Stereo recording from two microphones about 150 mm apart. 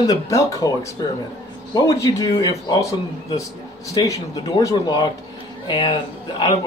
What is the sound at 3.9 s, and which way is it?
A man's voice, 25° left (ahead or behind).